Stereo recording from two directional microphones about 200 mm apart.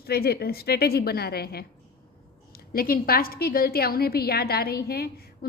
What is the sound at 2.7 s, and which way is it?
A woman's voice, 45° left (ahead or behind).